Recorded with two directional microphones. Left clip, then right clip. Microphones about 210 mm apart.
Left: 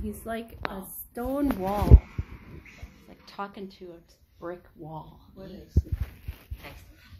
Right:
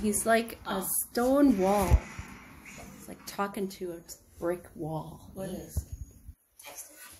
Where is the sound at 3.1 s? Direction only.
15° right (ahead or behind).